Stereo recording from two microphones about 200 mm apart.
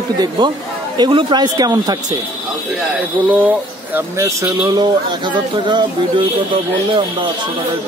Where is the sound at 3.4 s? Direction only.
10° right (ahead or behind).